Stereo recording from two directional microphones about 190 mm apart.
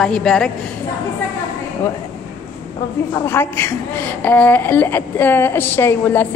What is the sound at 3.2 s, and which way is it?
A woman's voice, 10° left (ahead or behind).